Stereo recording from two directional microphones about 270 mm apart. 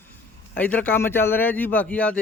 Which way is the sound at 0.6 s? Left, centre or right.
Centre.